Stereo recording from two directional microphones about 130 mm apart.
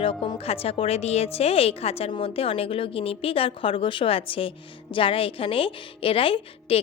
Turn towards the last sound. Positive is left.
turn(degrees=45)  # may be behind; listen again after turning